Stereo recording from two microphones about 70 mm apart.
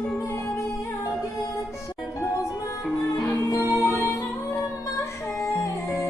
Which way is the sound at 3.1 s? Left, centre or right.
Left.